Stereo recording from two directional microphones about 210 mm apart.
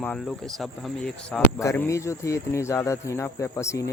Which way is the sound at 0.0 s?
5° left (ahead or behind).